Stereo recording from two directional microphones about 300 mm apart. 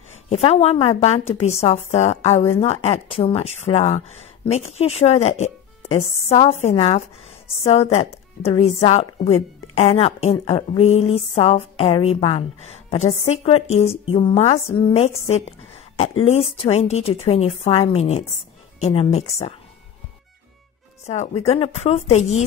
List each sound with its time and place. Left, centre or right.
0.3 s a woman's voice: centre
6.2 s a woman's voice: centre
21.0 s a woman's voice: left